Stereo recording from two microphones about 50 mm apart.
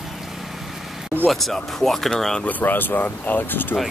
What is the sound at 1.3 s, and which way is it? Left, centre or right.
Speech, centre.